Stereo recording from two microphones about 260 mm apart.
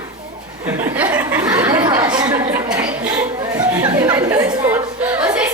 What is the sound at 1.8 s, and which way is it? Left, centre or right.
Chatter, centre.